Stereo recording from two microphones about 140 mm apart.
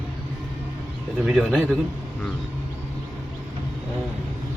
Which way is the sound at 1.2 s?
Centre (ahead or behind).